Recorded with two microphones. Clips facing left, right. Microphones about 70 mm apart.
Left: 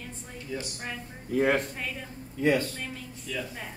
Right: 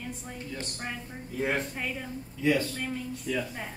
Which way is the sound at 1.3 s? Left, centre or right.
Left.